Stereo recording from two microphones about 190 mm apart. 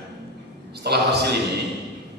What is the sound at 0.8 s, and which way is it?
Speech, 60° right (ahead or behind).